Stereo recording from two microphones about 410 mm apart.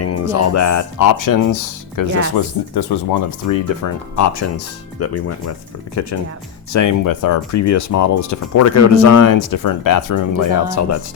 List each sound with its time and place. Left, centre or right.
0.0 s speech: left
2.4 s speech: left
4.1 s speech: left